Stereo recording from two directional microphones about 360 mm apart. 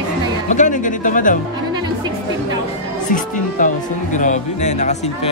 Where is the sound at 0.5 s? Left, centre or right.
Left.